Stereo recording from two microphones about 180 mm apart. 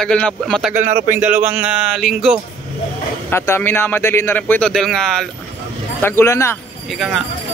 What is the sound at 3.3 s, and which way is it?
Speech, 15° left (ahead or behind).